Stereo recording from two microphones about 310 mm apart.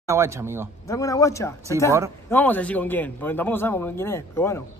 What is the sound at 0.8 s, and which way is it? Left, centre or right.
A man's voice, centre.